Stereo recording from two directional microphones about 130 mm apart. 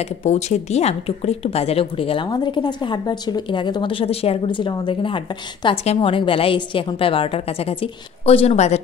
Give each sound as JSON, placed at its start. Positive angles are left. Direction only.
{"t": 0.0, "sound": "a woman's voice", "side_deg": 60}